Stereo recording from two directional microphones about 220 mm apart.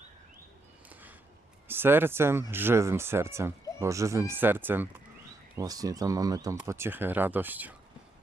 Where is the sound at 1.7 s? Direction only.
10° right (ahead or behind).